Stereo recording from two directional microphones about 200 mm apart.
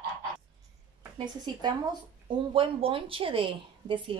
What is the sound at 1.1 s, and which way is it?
A woman's voice, 25° right (ahead or behind).